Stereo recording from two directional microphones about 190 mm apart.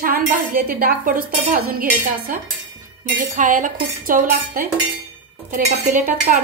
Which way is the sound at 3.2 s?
45° right (ahead or behind).